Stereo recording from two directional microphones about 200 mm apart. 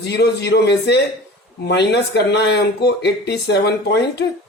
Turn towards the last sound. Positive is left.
turn(degrees=55)  # may be behind; listen again after turning